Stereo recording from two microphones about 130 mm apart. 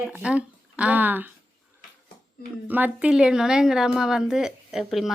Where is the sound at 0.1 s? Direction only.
10° right (ahead or behind).